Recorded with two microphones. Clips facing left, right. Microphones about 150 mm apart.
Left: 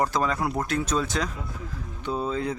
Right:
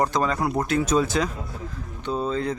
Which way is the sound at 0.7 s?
10° right (ahead or behind).